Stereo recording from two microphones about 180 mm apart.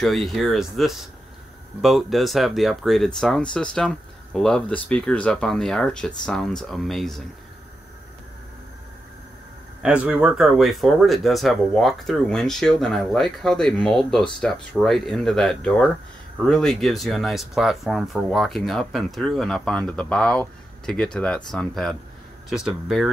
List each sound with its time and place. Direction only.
0.0 s speech: centre (ahead or behind)
9.8 s speech: 5° right (ahead or behind)